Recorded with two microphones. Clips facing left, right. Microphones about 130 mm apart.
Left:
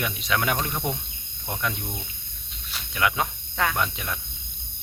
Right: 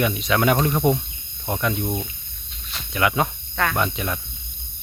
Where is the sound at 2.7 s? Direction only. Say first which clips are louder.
Right 3 dB; centre (ahead or behind).